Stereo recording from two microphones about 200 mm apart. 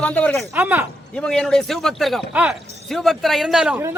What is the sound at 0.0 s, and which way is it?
Speech, 5° left (ahead or behind).